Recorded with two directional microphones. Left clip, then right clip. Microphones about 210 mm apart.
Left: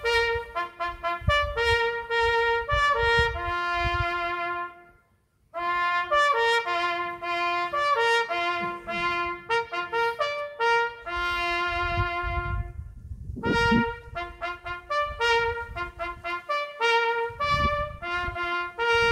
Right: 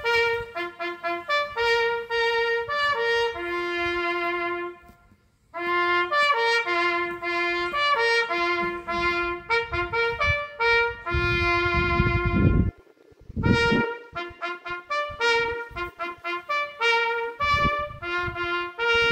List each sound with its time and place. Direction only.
0.0 s trumpet: 40° left (ahead or behind)
0.7 s music: 45° left (ahead or behind)
5.5 s trumpet: 50° left (ahead or behind)
13.4 s trumpet: 60° left (ahead or behind)